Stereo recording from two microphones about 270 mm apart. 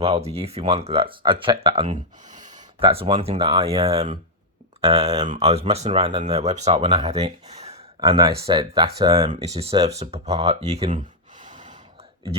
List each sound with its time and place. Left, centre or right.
0.0 s speech: right